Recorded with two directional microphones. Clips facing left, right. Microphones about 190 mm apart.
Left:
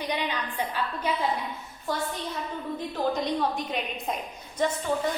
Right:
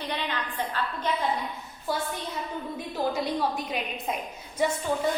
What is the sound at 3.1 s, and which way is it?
A woman's voice, 5° right (ahead or behind).